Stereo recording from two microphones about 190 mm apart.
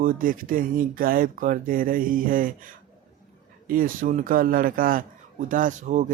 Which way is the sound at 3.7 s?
45° right (ahead or behind).